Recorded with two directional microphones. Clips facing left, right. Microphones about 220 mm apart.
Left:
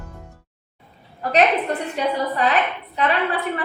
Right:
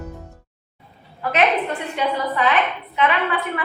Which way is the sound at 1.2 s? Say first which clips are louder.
Left 1 dB; 35° left (ahead or behind).